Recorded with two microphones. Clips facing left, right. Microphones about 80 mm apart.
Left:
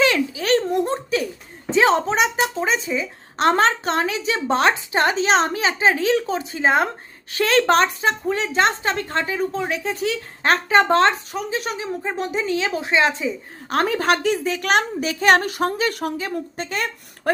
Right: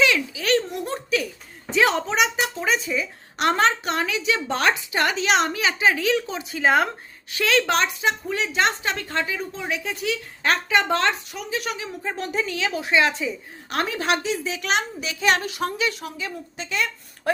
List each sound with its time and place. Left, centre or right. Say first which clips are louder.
0.0 s giggle: left 2 dB; left
1.7 s a sound: left 4 dB; left
3.6 s a woman's voice: left 2 dB; left